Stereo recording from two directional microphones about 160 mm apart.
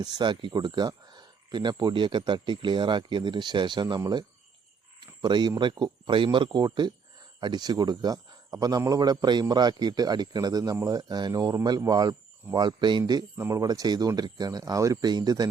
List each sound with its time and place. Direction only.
0.0 s speech: 30° right (ahead or behind)